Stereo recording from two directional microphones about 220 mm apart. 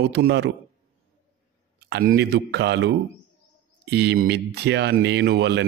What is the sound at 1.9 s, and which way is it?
Speech, 45° right (ahead or behind).